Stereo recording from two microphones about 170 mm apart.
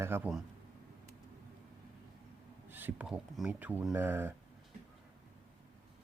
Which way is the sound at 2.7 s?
10° right (ahead or behind).